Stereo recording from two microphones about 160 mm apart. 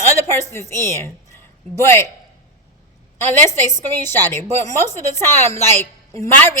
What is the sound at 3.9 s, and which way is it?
A woman's voice, 15° left (ahead or behind).